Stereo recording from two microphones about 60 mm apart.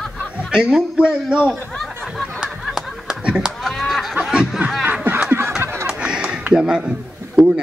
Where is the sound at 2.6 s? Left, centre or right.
Centre.